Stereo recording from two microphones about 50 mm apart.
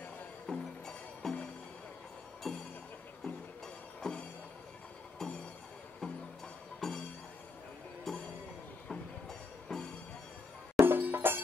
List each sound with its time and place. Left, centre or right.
0.5 s music: centre
2.4 s music: centre
5.2 s music: centre
6.8 s music: centre
8.1 s music: centre
9.3 s music: centre
10.8 s music: right